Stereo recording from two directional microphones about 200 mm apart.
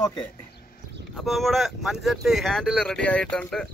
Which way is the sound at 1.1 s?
Centre (ahead or behind).